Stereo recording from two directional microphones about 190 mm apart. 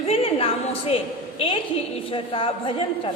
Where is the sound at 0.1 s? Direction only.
30° left (ahead or behind).